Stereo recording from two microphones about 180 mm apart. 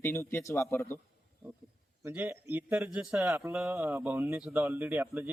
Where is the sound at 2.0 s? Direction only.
10° right (ahead or behind).